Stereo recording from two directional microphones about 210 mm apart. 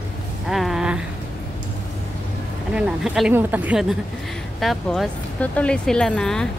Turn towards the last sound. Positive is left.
turn(degrees=5)  # may be behind; listen again after turning